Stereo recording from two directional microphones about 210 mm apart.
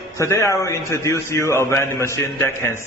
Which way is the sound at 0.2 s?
15° left (ahead or behind).